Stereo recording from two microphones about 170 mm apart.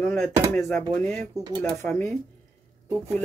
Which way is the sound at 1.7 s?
10° left (ahead or behind).